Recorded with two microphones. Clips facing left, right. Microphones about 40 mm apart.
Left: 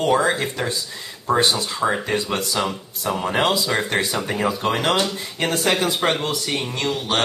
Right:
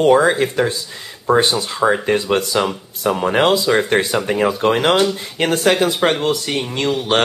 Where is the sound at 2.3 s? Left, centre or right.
Right.